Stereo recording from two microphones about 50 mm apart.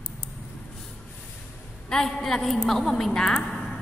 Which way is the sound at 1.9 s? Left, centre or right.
Centre.